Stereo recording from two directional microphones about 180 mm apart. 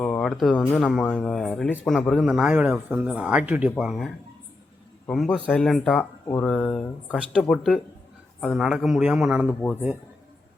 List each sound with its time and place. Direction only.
0.0 s speech: centre (ahead or behind)